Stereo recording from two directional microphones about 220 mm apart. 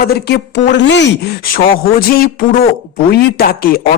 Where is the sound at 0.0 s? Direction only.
50° left (ahead or behind).